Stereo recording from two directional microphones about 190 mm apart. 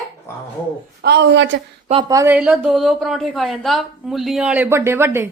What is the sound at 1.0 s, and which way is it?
Speech, 60° right (ahead or behind).